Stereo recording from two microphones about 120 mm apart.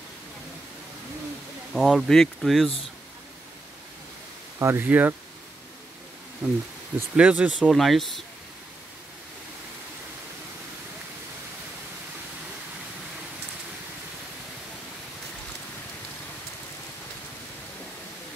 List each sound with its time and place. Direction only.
1.7 s speech: centre (ahead or behind)
4.6 s speech: 20° right (ahead or behind)
6.4 s speech: 15° right (ahead or behind); by 8.2 s centre (ahead or behind)